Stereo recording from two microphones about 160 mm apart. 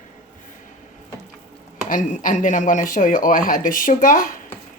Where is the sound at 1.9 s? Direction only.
55° left (ahead or behind).